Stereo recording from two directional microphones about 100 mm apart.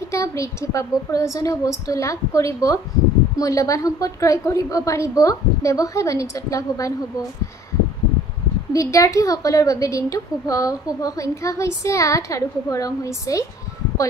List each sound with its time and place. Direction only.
0.1 s a woman's voice: 30° left (ahead or behind)
8.7 s a woman's voice: 30° left (ahead or behind)